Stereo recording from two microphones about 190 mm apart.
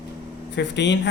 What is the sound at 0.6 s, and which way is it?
Speech, 65° left (ahead or behind).